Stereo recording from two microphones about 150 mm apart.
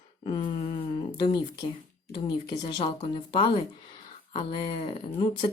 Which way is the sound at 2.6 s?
35° left (ahead or behind).